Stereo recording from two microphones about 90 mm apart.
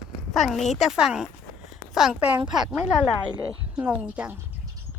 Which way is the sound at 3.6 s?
15° right (ahead or behind).